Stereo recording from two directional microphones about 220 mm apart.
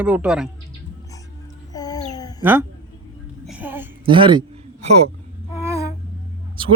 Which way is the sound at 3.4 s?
5° right (ahead or behind).